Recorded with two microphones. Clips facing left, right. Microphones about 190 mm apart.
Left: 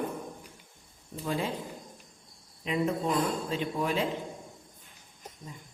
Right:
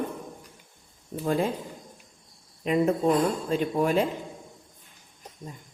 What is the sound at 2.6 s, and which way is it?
Speech, 45° right (ahead or behind).